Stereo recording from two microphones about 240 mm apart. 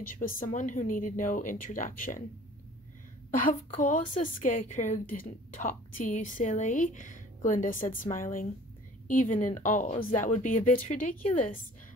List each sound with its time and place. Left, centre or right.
0.0 s a woman's voice: left
3.3 s a woman's voice: left